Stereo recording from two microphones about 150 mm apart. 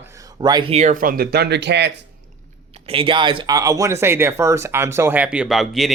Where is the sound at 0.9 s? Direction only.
65° right (ahead or behind); by 1.6 s 90° right.